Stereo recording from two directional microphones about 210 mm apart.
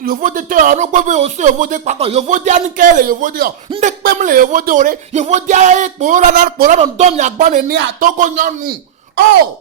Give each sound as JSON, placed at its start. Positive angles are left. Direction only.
{"t": 0.0, "sound": "speech", "side_deg": -40}